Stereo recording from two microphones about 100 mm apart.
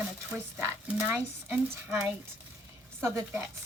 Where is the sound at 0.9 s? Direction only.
25° right (ahead or behind).